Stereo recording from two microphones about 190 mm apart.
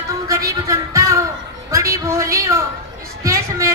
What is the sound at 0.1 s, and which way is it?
Music, 15° right (ahead or behind).